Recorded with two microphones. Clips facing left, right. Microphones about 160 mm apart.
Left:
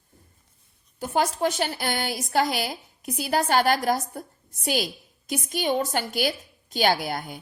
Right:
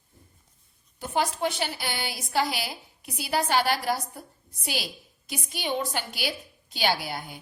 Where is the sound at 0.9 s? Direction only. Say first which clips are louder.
Left 3 dB; 45° left (ahead or behind).